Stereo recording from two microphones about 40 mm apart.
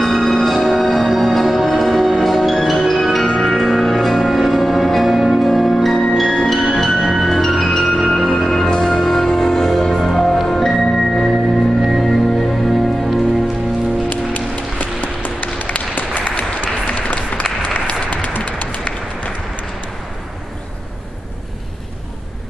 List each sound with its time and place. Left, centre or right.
0.0 s music: centre
11.8 s music: centre
14.0 s music: left
16.2 s applause: left
18.1 s a sound: left